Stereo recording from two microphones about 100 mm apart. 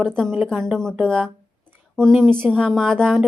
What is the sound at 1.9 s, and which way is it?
Speech, 5° left (ahead or behind).